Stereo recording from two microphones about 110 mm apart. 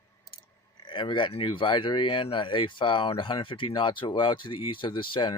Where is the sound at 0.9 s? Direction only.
45° left (ahead or behind).